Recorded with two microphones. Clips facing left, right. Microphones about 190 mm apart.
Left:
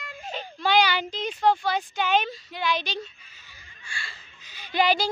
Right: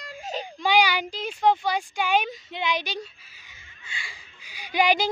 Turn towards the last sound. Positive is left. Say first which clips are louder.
# right 1 dB
turn(degrees=-15)  # may be behind; listen again after turning